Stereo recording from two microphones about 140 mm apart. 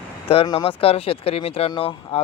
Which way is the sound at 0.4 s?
35° left (ahead or behind).